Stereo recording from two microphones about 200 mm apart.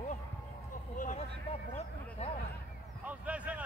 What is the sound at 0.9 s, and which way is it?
Vehicle, 40° left (ahead or behind).